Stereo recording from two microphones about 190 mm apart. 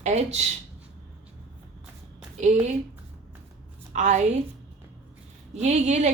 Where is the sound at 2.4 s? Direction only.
35° right (ahead or behind).